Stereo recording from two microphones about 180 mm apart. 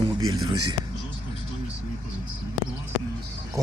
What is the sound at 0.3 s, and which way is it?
Speech, 20° right (ahead or behind).